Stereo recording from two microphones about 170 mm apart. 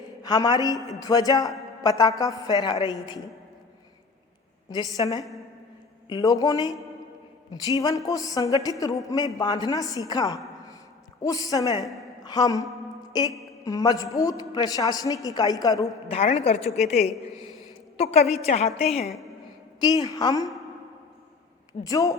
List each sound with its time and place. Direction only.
0.2 s a man's voice: 20° left (ahead or behind)
4.7 s a woman's voice: 20° left (ahead or behind)
7.8 s a woman's voice: 20° left (ahead or behind)
16.0 s a woman's voice: 35° left (ahead or behind)
19.8 s a woman's voice: 20° left (ahead or behind)
21.7 s speech: 20° left (ahead or behind)